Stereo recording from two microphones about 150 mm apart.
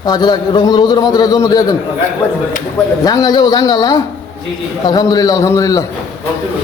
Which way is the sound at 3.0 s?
25° left (ahead or behind).